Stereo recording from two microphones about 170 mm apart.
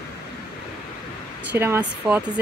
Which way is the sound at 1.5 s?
15° right (ahead or behind).